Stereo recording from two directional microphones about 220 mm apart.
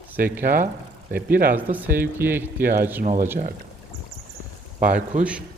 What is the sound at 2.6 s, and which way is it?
Speech, 40° right (ahead or behind).